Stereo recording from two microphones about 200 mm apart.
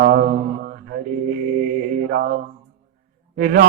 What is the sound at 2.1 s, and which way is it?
Mantra, 45° right (ahead or behind).